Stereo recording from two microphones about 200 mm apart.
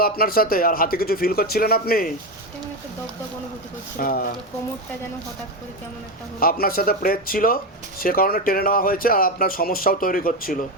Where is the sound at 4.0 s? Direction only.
45° left (ahead or behind).